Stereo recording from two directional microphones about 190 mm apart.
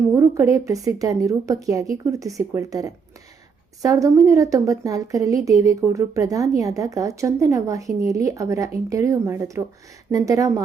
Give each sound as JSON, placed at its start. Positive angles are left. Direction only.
{"t": 0.1, "sound": "a woman's voice", "side_deg": -15}